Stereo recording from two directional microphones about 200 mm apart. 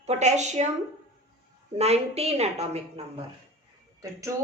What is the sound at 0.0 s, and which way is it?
Speech, 35° right (ahead or behind).